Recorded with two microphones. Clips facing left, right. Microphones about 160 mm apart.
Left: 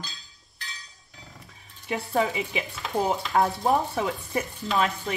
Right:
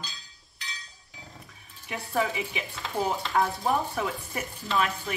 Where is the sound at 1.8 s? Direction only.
25° left (ahead or behind).